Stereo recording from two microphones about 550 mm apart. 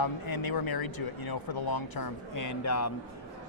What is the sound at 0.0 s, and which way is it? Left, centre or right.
Speech, left.